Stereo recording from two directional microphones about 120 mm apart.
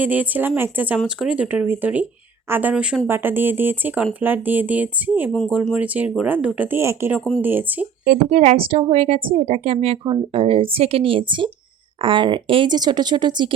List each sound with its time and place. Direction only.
0.0 s speech: 15° right (ahead or behind)
8.0 s speech: 80° right; by 13.5 s 40° right (ahead or behind)